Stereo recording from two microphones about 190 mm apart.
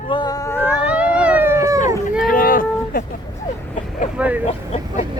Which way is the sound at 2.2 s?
45° left (ahead or behind).